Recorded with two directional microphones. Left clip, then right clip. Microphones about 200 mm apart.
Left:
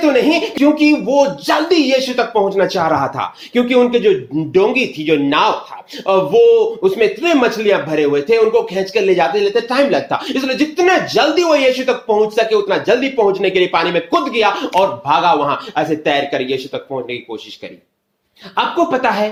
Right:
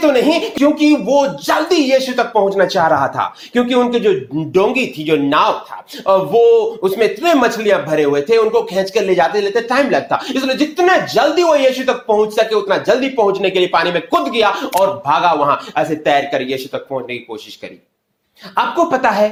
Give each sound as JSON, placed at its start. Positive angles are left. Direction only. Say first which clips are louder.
{"t": 0.0, "sound": "speech", "louder": "even", "side_deg": -25}
{"t": 18.5, "sound": "speech", "louder": "right 1 dB", "side_deg": -25}